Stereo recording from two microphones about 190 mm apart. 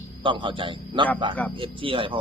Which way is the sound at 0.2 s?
25° right (ahead or behind).